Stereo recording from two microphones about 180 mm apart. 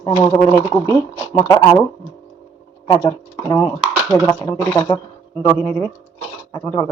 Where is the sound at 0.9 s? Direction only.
15° left (ahead or behind).